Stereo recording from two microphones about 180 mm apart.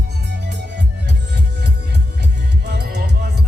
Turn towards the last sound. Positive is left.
turn(degrees=-65)  # may be behind; listen again after turning